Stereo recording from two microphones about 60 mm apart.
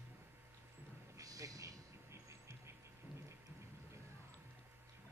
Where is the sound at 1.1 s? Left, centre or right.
Right.